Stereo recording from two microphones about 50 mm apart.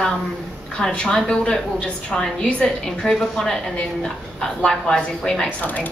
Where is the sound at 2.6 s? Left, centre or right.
Centre.